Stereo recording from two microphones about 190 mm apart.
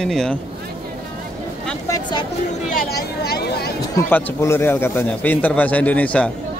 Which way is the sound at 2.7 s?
55° left (ahead or behind).